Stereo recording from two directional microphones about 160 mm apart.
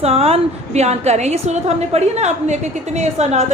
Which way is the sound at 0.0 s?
40° right (ahead or behind).